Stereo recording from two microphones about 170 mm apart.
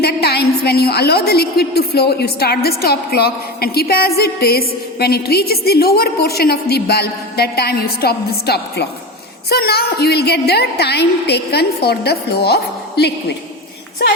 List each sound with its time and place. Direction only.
0.0 s a woman's voice: 70° left (ahead or behind)